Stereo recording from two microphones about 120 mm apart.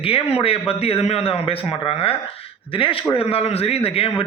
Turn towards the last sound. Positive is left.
turn(degrees=55)  # may be behind; listen again after turning